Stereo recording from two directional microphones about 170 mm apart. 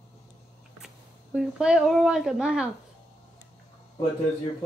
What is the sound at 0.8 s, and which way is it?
Speech, 5° right (ahead or behind).